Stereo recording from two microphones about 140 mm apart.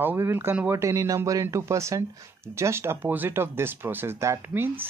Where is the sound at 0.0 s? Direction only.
15° right (ahead or behind).